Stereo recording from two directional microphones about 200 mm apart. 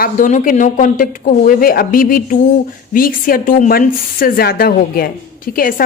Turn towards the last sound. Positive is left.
turn(degrees=45)  # may be behind; listen again after turning